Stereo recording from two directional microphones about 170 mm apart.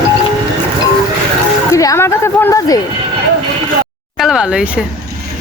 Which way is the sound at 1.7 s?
20° left (ahead or behind).